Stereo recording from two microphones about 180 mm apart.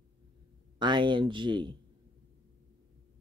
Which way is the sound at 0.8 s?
25° right (ahead or behind).